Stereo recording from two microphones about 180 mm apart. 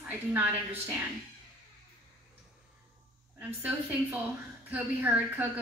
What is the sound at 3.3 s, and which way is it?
A woman's voice, 5° right (ahead or behind).